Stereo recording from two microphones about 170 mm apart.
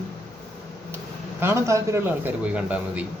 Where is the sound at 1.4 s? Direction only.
15° right (ahead or behind).